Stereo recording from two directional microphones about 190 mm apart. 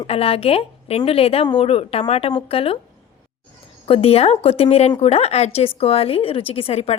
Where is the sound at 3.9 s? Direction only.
30° left (ahead or behind).